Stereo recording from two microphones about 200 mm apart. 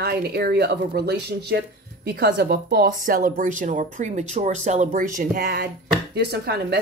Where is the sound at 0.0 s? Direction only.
55° right (ahead or behind).